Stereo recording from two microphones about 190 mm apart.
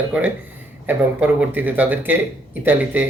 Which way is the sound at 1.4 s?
10° right (ahead or behind).